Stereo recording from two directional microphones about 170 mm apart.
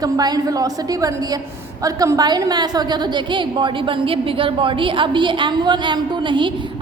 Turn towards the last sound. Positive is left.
turn(degrees=-30)  # may be behind; listen again after turning